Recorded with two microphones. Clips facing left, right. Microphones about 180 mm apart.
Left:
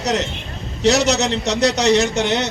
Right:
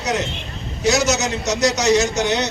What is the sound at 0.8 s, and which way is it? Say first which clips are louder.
Speech: left 2 dB; 65° left (ahead or behind).